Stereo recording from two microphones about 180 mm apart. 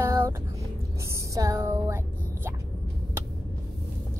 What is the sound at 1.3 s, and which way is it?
Speech, 15° right (ahead or behind).